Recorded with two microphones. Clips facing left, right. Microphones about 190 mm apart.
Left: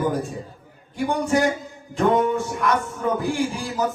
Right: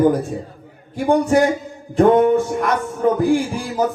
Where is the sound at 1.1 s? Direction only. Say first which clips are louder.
Right 6 dB; 35° right (ahead or behind).